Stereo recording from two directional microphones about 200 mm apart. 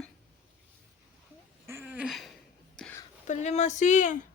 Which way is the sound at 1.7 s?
10° right (ahead or behind).